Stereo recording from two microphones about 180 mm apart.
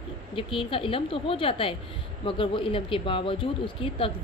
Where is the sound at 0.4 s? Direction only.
30° left (ahead or behind).